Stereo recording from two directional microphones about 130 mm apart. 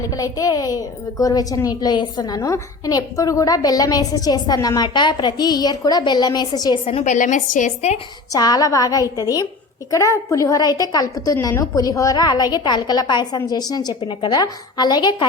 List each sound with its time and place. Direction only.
0.0 s a woman's voice: 25° left (ahead or behind)
6.8 s a woman's voice: 50° left (ahead or behind)
7.1 s a woman's voice: 70° left (ahead or behind)
8.3 s a woman's voice: 30° left (ahead or behind)